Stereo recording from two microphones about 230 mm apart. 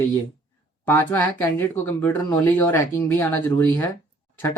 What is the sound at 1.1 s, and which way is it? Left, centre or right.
Speech, centre.